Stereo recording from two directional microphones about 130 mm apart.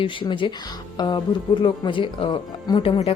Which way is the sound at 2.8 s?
50° left (ahead or behind).